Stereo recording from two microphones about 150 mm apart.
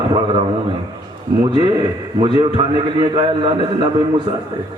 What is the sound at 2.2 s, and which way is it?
A man's voice, 30° right (ahead or behind).